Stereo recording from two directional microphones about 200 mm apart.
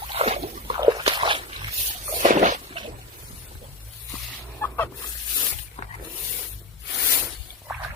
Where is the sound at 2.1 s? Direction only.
40° right (ahead or behind).